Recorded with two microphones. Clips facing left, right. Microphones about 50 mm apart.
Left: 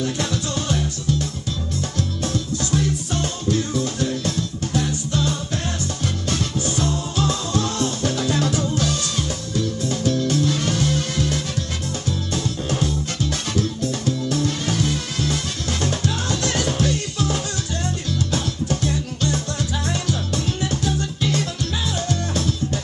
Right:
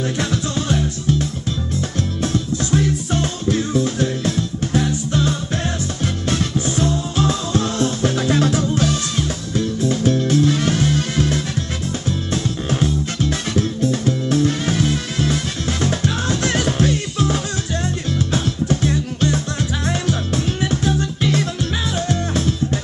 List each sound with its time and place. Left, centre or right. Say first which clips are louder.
0.2 s music: right 3 dB; right
2.7 s music: right 4 dB; right
6.3 s music: right 3 dB; right
12.6 s music: right 3 dB; right
22.1 s music: right 3 dB; right